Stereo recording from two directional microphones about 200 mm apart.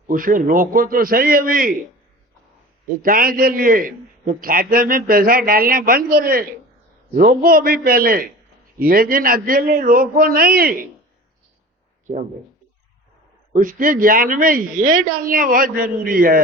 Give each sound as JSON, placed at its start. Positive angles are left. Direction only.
{"t": 0.1, "sound": "a man's voice", "side_deg": -45}
{"t": 2.8, "sound": "a man's voice", "side_deg": -45}
{"t": 13.5, "sound": "a man's voice", "side_deg": -45}